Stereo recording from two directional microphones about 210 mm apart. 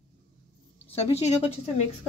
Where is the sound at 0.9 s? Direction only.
30° left (ahead or behind).